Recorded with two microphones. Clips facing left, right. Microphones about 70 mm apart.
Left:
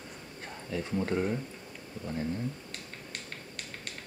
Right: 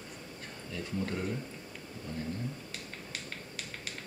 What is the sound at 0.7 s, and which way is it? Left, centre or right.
Speech, left.